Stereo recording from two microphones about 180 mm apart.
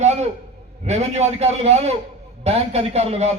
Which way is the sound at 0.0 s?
40° right (ahead or behind).